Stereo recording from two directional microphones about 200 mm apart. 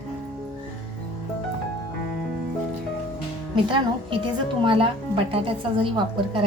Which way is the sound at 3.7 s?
25° right (ahead or behind).